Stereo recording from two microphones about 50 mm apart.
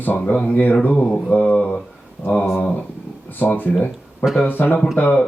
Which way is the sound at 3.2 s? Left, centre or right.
Left.